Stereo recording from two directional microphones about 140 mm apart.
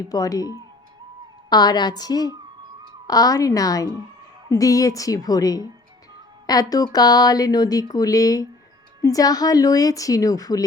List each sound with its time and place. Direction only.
0.1 s speech: 25° left (ahead or behind)